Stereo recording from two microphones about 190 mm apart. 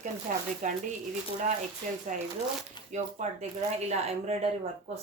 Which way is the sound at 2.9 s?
40° right (ahead or behind).